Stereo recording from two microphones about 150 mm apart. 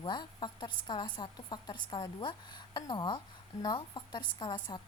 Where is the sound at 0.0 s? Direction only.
30° left (ahead or behind).